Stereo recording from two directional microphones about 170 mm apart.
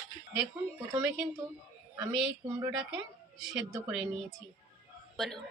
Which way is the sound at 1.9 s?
10° right (ahead or behind).